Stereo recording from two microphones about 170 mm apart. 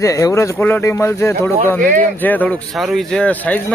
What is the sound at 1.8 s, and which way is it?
Speech, 55° right (ahead or behind).